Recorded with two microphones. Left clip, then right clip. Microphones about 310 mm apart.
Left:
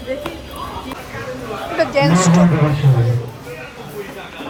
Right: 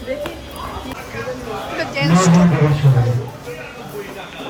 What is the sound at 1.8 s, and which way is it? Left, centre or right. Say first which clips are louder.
Speech: left 3 dB; centre.